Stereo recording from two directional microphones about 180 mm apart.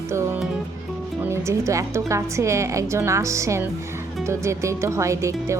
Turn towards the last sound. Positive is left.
turn(degrees=-15)  # may be behind; listen again after turning